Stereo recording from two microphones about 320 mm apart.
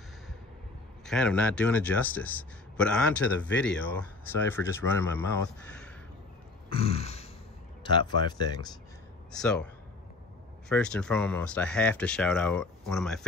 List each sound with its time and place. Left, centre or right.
1.0 s speech: centre
6.7 s grunt: centre
7.8 s speech: centre
9.3 s speech: centre
10.7 s speech: centre